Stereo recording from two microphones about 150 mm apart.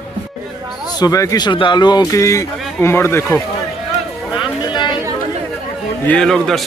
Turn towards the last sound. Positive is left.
turn(degrees=5)  # may be behind; listen again after turning